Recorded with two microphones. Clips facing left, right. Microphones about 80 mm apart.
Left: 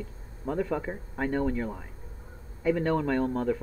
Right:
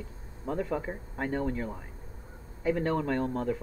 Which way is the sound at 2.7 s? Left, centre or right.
Centre.